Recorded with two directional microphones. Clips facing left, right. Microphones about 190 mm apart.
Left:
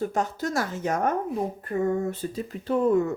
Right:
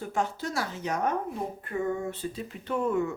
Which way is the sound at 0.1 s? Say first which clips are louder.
Left 3 dB; 40° left (ahead or behind).